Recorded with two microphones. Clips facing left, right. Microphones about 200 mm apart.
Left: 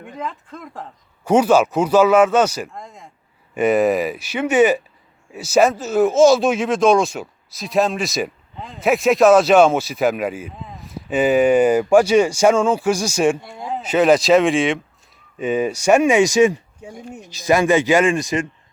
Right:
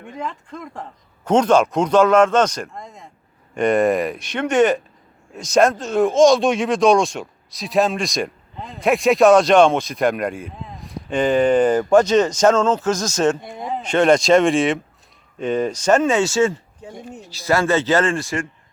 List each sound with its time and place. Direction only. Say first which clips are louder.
0.2 s a man's voice: right 1 dB; centre (ahead or behind)
13.4 s speech: right 2 dB; 20° right (ahead or behind)
13.7 s a man's voice: left 1 dB; 5° left (ahead or behind)